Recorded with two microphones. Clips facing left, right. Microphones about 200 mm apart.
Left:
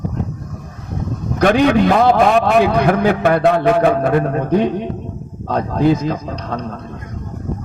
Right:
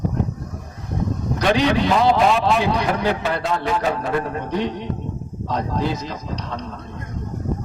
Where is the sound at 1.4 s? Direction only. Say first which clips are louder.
Left 6 dB; 55° left (ahead or behind).